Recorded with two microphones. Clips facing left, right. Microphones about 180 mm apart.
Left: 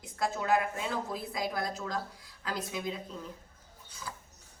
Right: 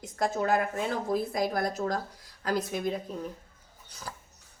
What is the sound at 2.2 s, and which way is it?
Speech, 40° right (ahead or behind).